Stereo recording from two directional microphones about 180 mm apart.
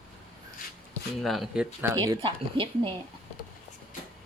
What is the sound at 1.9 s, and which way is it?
Speech, 20° right (ahead or behind).